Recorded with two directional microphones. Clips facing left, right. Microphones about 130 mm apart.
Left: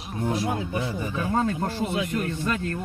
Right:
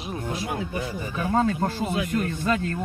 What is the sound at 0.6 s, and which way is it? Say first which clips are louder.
A man's voice: left 1 dB; 25° left (ahead or behind).